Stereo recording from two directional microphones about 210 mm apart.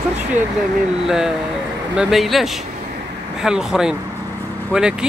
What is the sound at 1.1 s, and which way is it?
Speech, 5° right (ahead or behind).